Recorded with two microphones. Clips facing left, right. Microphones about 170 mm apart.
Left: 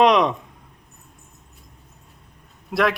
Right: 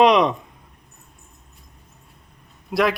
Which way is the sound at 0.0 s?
Centre (ahead or behind).